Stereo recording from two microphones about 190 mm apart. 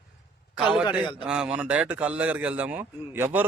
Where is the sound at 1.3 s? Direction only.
5° right (ahead or behind).